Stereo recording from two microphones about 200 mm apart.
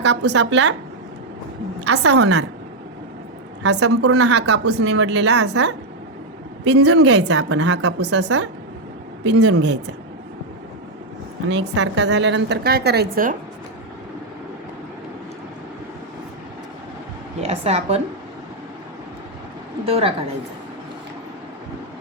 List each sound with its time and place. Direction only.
0.0 s a woman's voice: 60° right (ahead or behind)
1.8 s a woman's voice: 90° right
3.6 s a woman's voice: 75° right (ahead or behind); by 8.4 s 60° right (ahead or behind)
9.2 s a woman's voice: 75° right (ahead or behind); by 9.9 s 60° right (ahead or behind)
11.4 s a woman's voice: 65° right (ahead or behind); by 13.3 s 50° right (ahead or behind)
17.4 s a woman's voice: 30° right (ahead or behind)
19.8 s a woman's voice: 30° right (ahead or behind)